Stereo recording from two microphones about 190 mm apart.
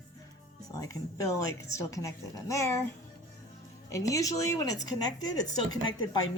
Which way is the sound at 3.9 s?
15° left (ahead or behind).